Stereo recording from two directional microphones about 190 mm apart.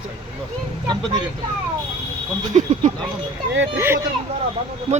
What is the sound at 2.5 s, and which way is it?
Speech, 40° right (ahead or behind).